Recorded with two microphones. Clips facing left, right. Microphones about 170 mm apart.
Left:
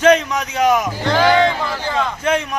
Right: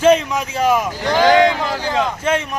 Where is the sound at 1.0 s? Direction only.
15° right (ahead or behind).